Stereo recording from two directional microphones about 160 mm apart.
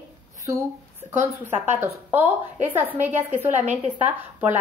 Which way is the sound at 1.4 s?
15° right (ahead or behind).